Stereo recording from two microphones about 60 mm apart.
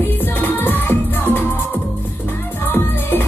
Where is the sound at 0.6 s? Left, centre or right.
Left.